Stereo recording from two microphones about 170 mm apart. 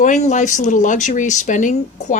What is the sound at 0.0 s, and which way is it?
A woman's voice, 45° left (ahead or behind).